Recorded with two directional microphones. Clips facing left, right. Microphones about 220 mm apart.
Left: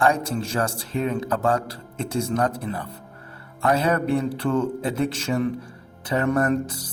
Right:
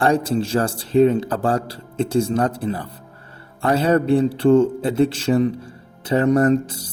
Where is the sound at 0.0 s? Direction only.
30° right (ahead or behind).